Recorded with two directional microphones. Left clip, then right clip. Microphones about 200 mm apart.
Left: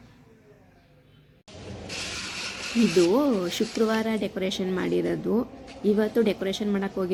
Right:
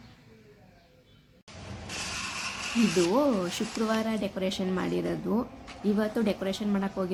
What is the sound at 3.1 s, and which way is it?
A woman's voice, 10° left (ahead or behind).